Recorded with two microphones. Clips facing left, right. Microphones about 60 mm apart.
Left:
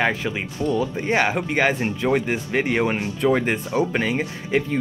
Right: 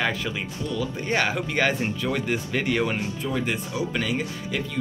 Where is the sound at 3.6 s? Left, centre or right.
Left.